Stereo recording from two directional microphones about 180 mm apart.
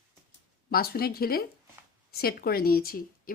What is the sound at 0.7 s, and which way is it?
Speech, 60° left (ahead or behind).